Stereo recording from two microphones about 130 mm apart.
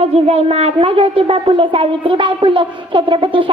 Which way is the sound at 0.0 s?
55° right (ahead or behind).